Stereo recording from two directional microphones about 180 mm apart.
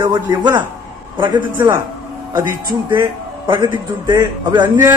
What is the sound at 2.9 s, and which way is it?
A man's voice, 25° right (ahead or behind).